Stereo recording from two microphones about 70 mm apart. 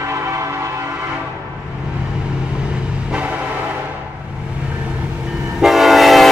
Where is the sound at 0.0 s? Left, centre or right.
Right.